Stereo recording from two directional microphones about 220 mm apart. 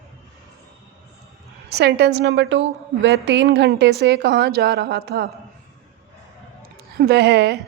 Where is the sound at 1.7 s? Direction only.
50° right (ahead or behind).